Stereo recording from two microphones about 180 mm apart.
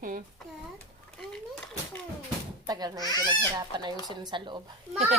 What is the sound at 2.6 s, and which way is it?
Speech, 20° right (ahead or behind).